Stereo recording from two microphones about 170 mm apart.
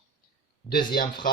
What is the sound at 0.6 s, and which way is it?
Speech, 65° left (ahead or behind).